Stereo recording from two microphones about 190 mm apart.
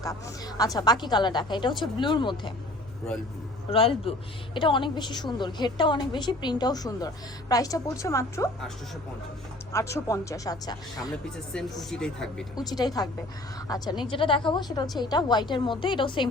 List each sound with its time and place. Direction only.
0.0 s a woman's voice: 20° left (ahead or behind)
3.7 s a woman's voice: 30° left (ahead or behind)
9.7 s speech: 15° left (ahead or behind)
11.5 s speech: centre (ahead or behind)
12.5 s a woman's voice: 20° left (ahead or behind)